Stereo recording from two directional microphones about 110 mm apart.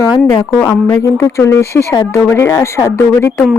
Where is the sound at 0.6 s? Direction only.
20° left (ahead or behind).